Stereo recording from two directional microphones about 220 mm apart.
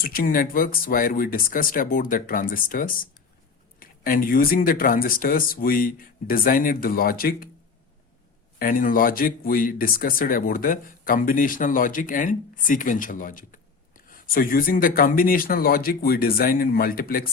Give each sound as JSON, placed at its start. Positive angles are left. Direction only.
{"t": 0.0, "sound": "speech", "side_deg": 40}
{"t": 8.5, "sound": "speech", "side_deg": 40}